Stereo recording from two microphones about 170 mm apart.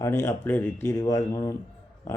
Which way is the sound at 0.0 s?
15° left (ahead or behind).